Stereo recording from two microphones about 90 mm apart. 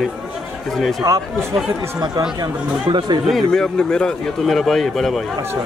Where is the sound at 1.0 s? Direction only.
40° right (ahead or behind).